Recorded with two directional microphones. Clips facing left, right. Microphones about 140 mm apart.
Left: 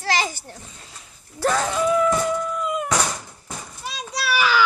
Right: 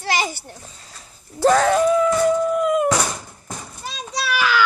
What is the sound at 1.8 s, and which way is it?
Music, 35° right (ahead or behind).